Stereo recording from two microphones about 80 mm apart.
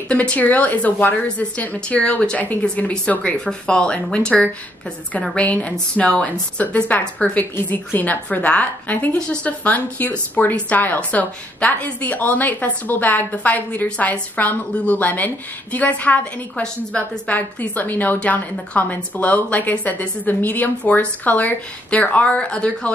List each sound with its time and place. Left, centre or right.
0.1 s a woman's voice: centre
17.3 s a woman's voice: left